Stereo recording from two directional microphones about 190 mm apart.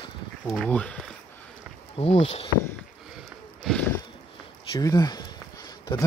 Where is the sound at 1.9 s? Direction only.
35° left (ahead or behind).